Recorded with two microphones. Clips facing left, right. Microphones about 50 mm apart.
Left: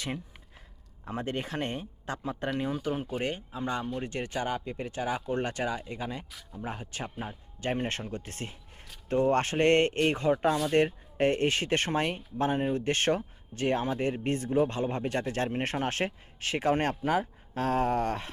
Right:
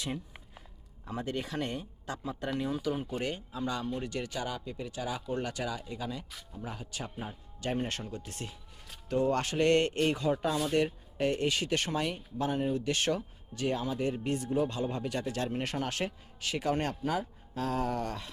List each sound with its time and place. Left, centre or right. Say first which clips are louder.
1.0 s speech: left 2 dB; left
2.9 s speech: left 2 dB; left